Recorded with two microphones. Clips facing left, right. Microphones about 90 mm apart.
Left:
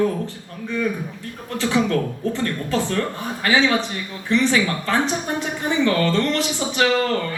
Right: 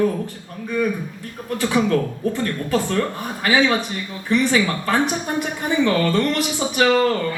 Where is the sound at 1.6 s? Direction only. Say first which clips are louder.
Right 1 dB; 15° right (ahead or behind).